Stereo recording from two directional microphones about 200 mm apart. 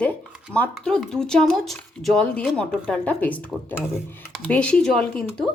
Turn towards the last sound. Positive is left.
turn(degrees=5)  # may be behind; listen again after turning